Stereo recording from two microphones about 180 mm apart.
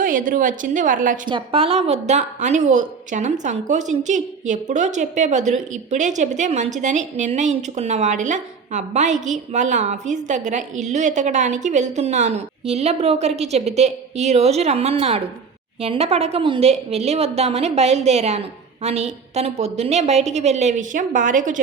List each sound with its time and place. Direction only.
0.0 s a woman's voice: 50° right (ahead or behind)
1.3 s a woman's voice: 30° right (ahead or behind)